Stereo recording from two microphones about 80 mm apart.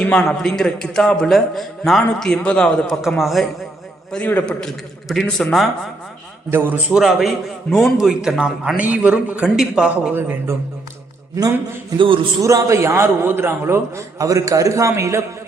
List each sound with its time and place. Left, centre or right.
0.2 s a man's voice: centre
3.2 s a man's voice: centre
6.5 s a man's voice: right
6.9 s a man's voice: centre
10.2 s a man's voice: right
11.3 s a man's voice: right
11.9 s a man's voice: right
12.4 s a man's voice: right
14.2 s a man's voice: right